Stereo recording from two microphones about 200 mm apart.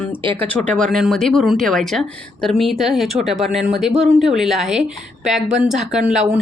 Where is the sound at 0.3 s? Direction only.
5° left (ahead or behind).